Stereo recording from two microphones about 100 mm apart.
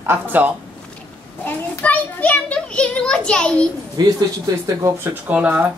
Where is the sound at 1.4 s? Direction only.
15° left (ahead or behind).